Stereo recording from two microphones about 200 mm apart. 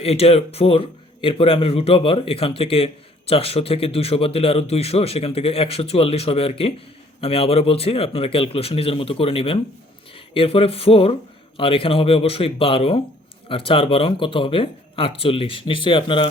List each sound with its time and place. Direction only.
0.0 s a man's voice: 30° left (ahead or behind)